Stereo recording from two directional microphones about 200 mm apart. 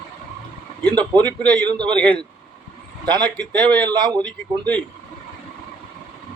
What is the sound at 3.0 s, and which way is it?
Speech, 20° right (ahead or behind).